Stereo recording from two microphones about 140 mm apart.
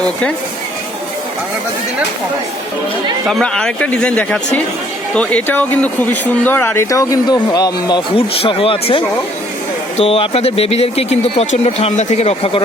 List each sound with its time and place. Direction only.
3.2 s speech: 5° left (ahead or behind); by 12.6 s 45° left (ahead or behind)